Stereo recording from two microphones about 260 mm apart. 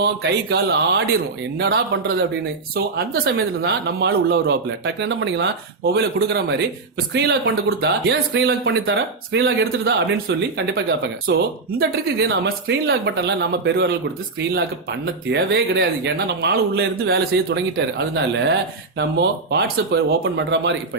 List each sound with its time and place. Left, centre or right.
0.0 s speech: right
15.3 s speech: right